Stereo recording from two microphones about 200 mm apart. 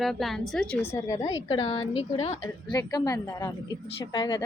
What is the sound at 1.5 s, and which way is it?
Speech, 30° left (ahead or behind).